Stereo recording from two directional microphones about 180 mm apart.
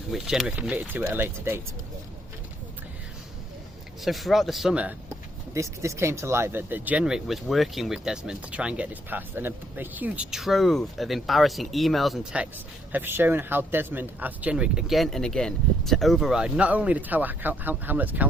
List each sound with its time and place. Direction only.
0.1 s speech: centre (ahead or behind)
4.0 s speech: centre (ahead or behind)